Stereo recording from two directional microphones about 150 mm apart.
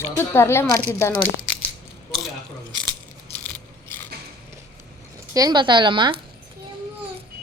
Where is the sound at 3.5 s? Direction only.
10° left (ahead or behind).